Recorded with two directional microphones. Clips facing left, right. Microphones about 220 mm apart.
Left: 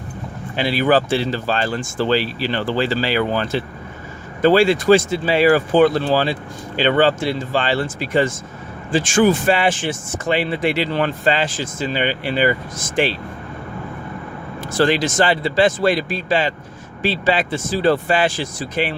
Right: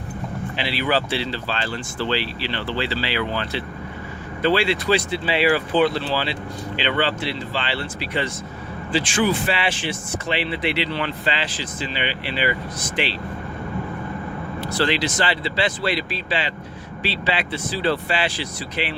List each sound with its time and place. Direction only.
0.5 s speech: 45° left (ahead or behind)
14.6 s speech: 45° left (ahead or behind)